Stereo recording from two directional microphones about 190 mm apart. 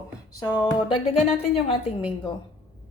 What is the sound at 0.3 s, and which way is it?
A woman's voice, 20° left (ahead or behind).